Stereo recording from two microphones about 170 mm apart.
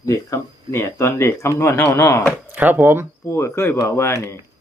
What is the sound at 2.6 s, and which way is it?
Speech, 10° right (ahead or behind).